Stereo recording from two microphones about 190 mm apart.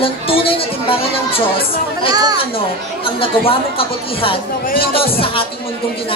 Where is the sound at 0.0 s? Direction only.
30° left (ahead or behind).